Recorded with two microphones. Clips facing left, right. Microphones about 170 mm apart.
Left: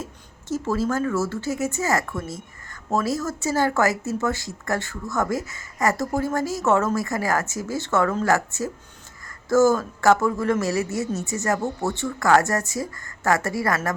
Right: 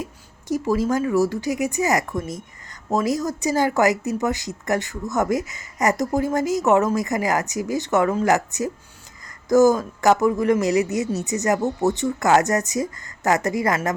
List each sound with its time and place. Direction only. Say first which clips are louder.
0.0 s speech: right 3 dB; 15° right (ahead or behind)